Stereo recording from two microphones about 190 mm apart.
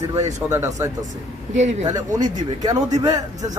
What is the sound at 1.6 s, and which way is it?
Speech, 35° right (ahead or behind).